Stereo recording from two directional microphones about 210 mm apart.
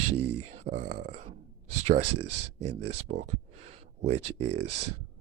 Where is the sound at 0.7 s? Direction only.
35° right (ahead or behind).